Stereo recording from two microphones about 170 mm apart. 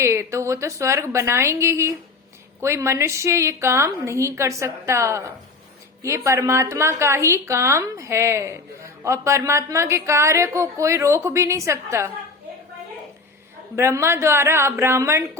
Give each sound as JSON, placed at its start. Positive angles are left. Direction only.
{"t": 0.0, "sound": "a woman's voice", "side_deg": -15}
{"t": 13.7, "sound": "a woman's voice", "side_deg": -15}